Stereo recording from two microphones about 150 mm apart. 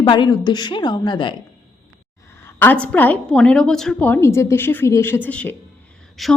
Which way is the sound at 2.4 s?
15° left (ahead or behind).